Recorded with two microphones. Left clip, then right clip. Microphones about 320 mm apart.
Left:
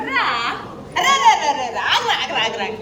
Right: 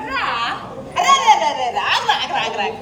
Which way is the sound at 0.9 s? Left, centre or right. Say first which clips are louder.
Right 2 dB; right.